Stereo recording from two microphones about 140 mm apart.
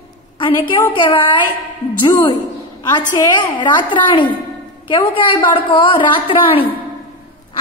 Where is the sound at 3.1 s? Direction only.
30° left (ahead or behind).